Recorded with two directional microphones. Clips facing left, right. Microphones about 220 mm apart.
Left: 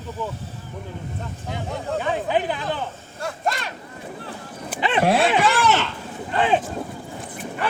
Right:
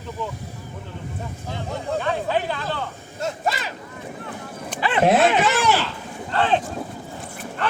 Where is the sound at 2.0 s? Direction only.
15° left (ahead or behind).